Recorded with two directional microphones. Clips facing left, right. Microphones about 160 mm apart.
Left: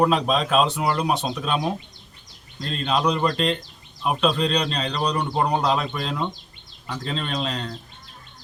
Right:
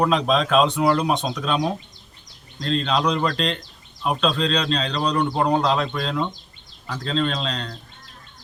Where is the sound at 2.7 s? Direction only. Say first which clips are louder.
Right 1 dB; 5° left (ahead or behind).